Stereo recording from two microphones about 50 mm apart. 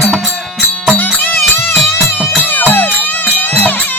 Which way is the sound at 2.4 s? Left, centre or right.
Left.